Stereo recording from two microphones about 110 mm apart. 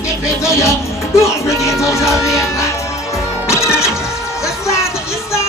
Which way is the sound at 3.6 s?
5° right (ahead or behind).